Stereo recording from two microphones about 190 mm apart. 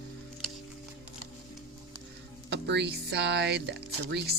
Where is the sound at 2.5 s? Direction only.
65° right (ahead or behind).